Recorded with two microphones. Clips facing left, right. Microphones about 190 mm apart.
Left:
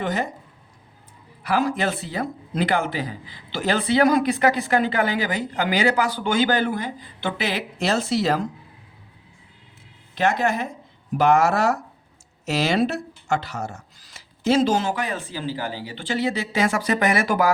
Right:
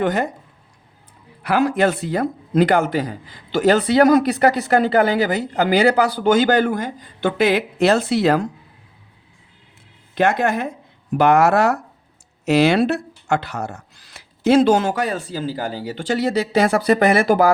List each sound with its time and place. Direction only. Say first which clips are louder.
0.0 s speech: right 6 dB; 55° right (ahead or behind)
1.5 s speech: right 5 dB; 65° right (ahead or behind)
10.2 s speech: right 4 dB; 55° right (ahead or behind); by 17.5 s 30° right (ahead or behind)